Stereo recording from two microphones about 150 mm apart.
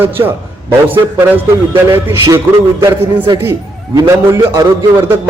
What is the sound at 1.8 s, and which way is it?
Speech, 20° right (ahead or behind).